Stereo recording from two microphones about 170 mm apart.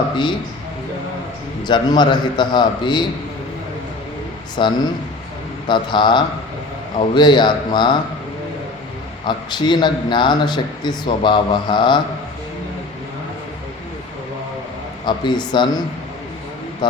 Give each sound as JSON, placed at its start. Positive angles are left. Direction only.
{"t": 1.6, "sound": "a man's voice", "side_deg": 25}
{"t": 4.6, "sound": "a man's voice", "side_deg": 30}
{"t": 9.2, "sound": "a man's voice", "side_deg": 25}
{"t": 15.0, "sound": "a man's voice", "side_deg": 25}